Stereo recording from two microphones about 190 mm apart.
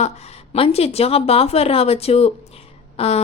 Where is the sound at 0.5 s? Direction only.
30° left (ahead or behind).